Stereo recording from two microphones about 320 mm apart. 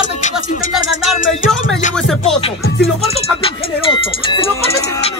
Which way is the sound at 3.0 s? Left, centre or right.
Centre.